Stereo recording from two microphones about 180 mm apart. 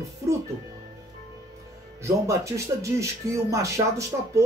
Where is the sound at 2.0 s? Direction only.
15° right (ahead or behind).